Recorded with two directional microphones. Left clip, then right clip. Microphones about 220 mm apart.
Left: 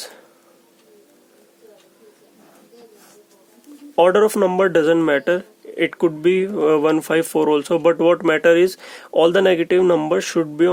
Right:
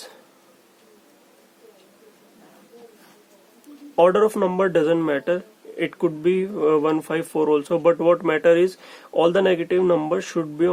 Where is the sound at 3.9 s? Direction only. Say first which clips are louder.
Left 3 dB; 25° left (ahead or behind).